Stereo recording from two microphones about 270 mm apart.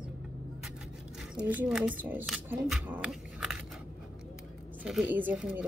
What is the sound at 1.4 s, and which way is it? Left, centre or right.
Speech, centre.